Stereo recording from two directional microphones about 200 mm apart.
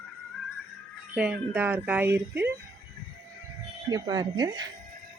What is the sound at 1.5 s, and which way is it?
Speech, 10° right (ahead or behind).